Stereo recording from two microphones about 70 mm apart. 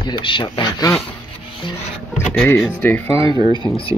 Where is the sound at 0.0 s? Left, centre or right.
Left.